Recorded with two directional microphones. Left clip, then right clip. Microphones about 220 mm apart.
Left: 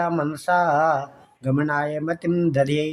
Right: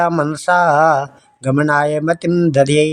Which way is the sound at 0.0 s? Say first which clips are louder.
Right 8 dB; 35° right (ahead or behind).